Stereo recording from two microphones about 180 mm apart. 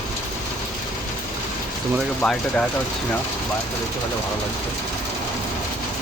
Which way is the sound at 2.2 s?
5° left (ahead or behind).